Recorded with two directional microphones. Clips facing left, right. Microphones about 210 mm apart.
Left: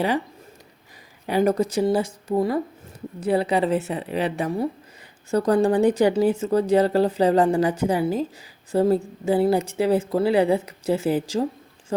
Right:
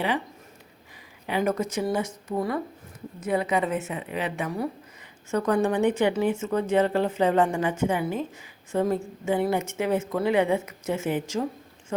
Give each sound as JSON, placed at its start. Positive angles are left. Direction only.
{"t": 1.3, "sound": "speech", "side_deg": 35}